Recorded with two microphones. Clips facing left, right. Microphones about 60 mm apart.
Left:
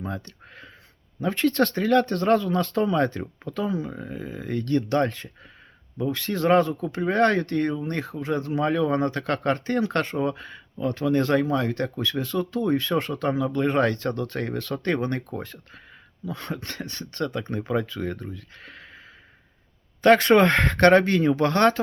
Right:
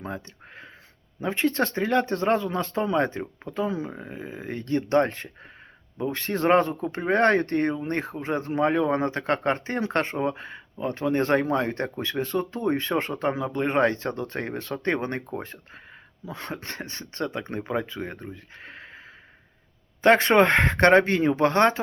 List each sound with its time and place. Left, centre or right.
0.0 s speech: right
20.0 s speech: right